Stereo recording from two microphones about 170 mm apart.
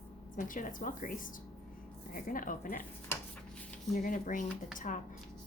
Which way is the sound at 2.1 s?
55° left (ahead or behind).